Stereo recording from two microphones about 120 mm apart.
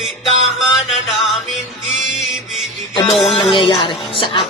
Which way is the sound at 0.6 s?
5° right (ahead or behind).